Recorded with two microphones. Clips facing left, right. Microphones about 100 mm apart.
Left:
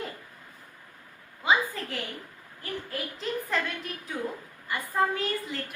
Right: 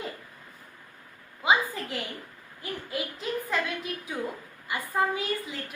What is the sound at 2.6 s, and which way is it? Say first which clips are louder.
A woman's voice: right 1 dB; 10° right (ahead or behind).